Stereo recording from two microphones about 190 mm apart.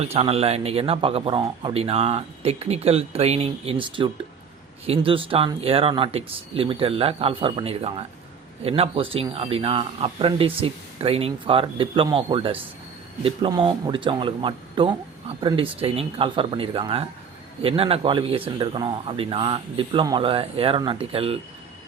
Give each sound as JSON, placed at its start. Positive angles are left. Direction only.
{"t": 0.0, "sound": "speech", "side_deg": -30}